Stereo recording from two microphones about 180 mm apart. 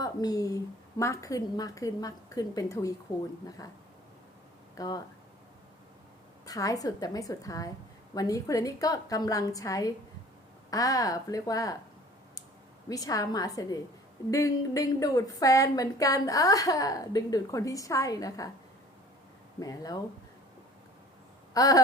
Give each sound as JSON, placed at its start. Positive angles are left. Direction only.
{"t": 0.0, "sound": "a woman's voice", "side_deg": 20}
{"t": 4.8, "sound": "a woman's voice", "side_deg": 20}
{"t": 6.4, "sound": "a woman's voice", "side_deg": 20}
{"t": 12.9, "sound": "a woman's voice", "side_deg": 20}
{"t": 19.5, "sound": "a woman's voice", "side_deg": 20}
{"t": 21.5, "sound": "a sound", "side_deg": 20}